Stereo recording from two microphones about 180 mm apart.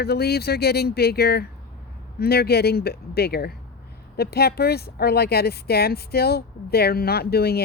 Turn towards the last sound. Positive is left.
turn(degrees=60)  # may be behind; listen again after turning